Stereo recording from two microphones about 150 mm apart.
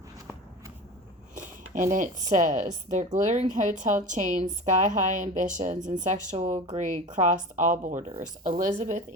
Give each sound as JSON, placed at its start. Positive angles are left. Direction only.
{"t": 1.4, "sound": "speech", "side_deg": -60}